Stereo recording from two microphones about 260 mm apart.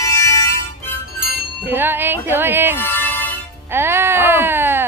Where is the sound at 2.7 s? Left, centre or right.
Centre.